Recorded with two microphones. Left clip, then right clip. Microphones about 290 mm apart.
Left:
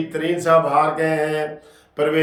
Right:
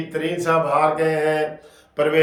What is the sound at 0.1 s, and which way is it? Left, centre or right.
A man's voice, centre.